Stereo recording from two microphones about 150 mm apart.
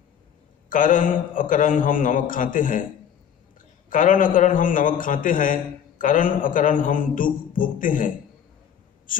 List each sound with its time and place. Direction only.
0.7 s a man's voice: 65° left (ahead or behind)
3.9 s a man's voice: 65° left (ahead or behind)